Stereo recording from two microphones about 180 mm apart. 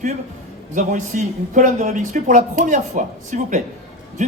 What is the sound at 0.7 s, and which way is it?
A man's voice, 45° right (ahead or behind).